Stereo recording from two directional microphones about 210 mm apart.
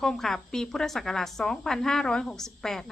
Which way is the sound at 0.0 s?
Centre (ahead or behind).